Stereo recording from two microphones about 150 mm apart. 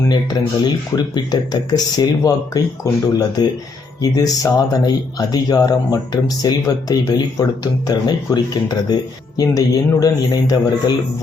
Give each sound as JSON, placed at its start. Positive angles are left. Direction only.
{"t": 0.6, "sound": "speech", "side_deg": 30}